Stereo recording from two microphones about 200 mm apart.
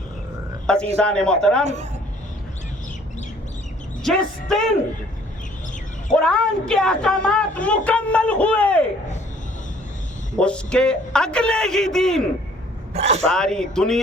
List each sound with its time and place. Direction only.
0.7 s a man's voice: 5° left (ahead or behind)
1.6 s a man's voice: 35° right (ahead or behind)
4.0 s a man's voice: centre (ahead or behind)
6.1 s a man's voice: 5° left (ahead or behind)
10.3 s a man's voice: 5° left (ahead or behind)
12.9 s speech: 30° right (ahead or behind)
13.2 s a man's voice: 5° left (ahead or behind)